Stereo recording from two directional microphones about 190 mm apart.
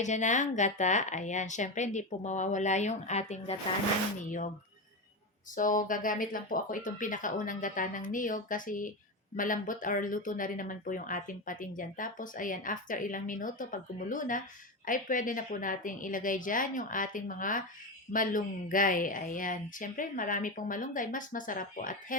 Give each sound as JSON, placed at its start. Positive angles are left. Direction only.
{"t": 0.0, "sound": "a woman's voice", "side_deg": 40}
{"t": 5.5, "sound": "speech", "side_deg": 45}